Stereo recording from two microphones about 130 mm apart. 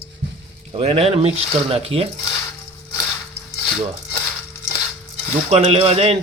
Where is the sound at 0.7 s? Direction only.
50° right (ahead or behind).